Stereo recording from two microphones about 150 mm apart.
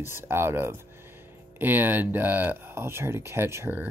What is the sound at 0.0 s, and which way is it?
Speech, 15° right (ahead or behind).